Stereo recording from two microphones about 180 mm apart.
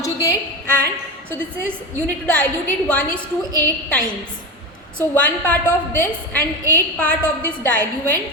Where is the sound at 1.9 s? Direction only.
5° left (ahead or behind).